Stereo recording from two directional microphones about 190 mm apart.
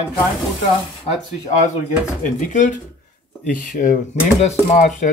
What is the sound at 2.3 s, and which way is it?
Speech, 40° left (ahead or behind).